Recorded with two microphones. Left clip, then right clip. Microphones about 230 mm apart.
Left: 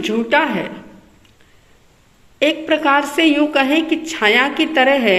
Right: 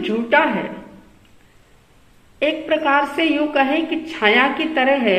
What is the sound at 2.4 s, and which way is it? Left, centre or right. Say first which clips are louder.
A woman's voice: left 3 dB; left.